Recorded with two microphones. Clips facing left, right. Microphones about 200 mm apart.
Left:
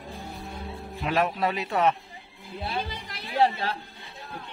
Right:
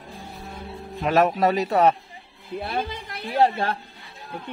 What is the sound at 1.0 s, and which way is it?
Speech, 45° right (ahead or behind).